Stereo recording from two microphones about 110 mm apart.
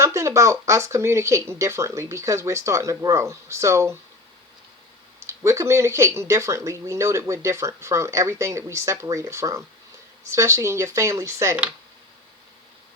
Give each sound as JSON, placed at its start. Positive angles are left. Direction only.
{"t": 0.0, "sound": "speech", "side_deg": -25}
{"t": 5.2, "sound": "speech", "side_deg": -25}